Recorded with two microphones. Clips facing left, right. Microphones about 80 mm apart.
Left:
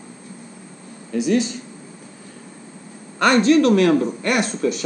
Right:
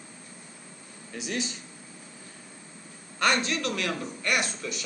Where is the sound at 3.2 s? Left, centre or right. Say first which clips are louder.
Left 12 dB; left.